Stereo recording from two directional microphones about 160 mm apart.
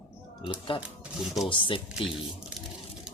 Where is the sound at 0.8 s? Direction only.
Centre (ahead or behind).